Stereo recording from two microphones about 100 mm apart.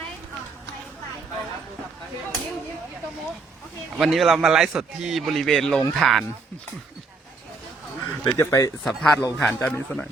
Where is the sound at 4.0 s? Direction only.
Centre (ahead or behind).